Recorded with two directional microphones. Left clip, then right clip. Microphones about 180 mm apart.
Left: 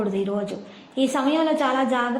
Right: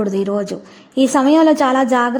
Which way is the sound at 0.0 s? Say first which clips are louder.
Right 6 dB; 40° right (ahead or behind).